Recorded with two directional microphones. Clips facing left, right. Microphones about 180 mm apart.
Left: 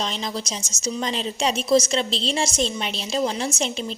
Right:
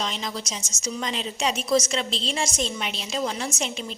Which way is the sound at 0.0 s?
30° left (ahead or behind).